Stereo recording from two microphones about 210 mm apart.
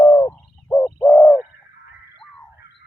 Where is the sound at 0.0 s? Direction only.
15° left (ahead or behind).